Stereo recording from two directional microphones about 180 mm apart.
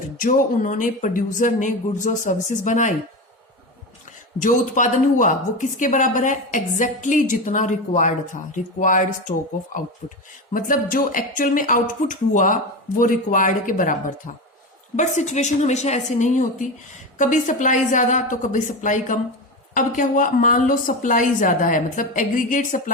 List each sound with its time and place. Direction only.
0.2 s a woman's voice: 50° left (ahead or behind)
4.4 s a woman's voice: 45° left (ahead or behind)
10.5 s a woman's voice: 50° left (ahead or behind)